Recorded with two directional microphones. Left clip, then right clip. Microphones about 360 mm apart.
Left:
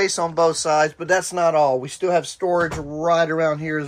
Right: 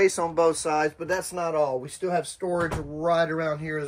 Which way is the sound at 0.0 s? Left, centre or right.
Centre.